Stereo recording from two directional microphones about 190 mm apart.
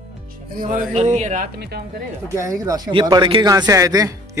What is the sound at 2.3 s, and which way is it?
Speech, 15° right (ahead or behind).